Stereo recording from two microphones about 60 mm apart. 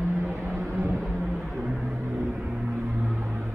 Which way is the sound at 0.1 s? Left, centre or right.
Right.